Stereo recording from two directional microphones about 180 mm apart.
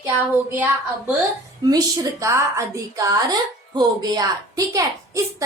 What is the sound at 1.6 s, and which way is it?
A woman's voice, 20° right (ahead or behind).